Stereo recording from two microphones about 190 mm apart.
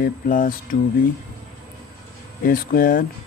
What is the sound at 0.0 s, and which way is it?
Speech, 45° left (ahead or behind).